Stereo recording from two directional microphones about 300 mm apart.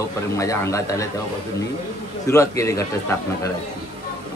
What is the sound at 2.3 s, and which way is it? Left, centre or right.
A man's voice, centre.